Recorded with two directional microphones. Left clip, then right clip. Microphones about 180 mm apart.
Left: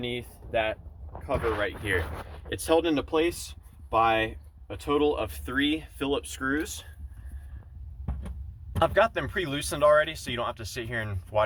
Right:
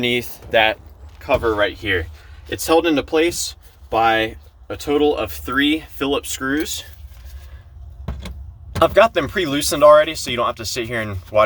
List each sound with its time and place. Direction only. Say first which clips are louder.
0.0 s speech: right 14 dB; 40° right (ahead or behind)
1.5 s speech: right 9 dB; 10° right (ahead or behind)
8.8 s speech: right 10 dB; 25° right (ahead or behind)